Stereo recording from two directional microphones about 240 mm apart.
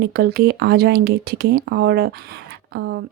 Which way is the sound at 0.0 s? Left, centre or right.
Right.